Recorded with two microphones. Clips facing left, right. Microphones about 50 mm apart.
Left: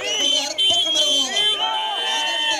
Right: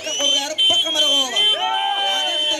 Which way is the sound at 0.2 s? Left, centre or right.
Right.